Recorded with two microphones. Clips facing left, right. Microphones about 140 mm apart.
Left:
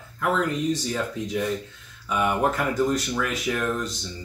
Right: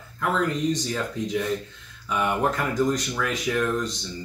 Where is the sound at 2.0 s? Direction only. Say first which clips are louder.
Left 1 dB; 5° left (ahead or behind).